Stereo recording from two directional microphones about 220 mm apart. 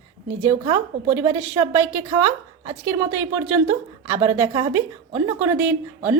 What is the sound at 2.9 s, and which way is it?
A woman's voice, 10° right (ahead or behind).